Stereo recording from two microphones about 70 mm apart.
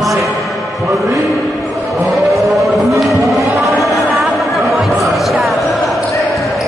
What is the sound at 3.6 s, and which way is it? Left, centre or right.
Chatter, centre.